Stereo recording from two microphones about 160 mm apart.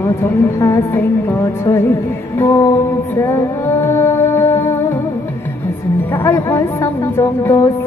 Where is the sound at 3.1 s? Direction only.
15° left (ahead or behind).